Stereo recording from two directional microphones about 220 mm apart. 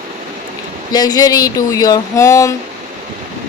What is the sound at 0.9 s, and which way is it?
Speech, 15° left (ahead or behind).